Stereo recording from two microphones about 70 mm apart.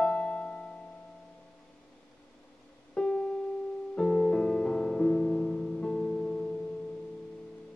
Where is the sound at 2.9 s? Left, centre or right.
Centre.